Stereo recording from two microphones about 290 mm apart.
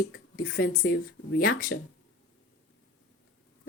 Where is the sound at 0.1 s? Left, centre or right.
Left.